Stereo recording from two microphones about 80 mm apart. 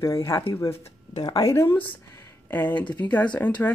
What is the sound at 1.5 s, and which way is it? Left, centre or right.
Speech, left.